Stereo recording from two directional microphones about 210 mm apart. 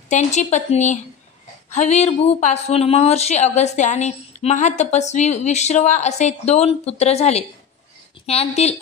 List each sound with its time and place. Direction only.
0.1 s a woman's voice: 35° left (ahead or behind)